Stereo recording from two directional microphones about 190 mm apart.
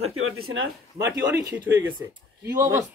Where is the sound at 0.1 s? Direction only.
90° right.